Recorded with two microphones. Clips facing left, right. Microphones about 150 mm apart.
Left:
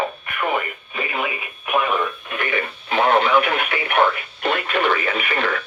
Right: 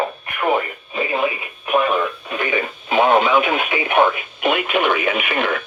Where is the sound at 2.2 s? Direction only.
20° right (ahead or behind).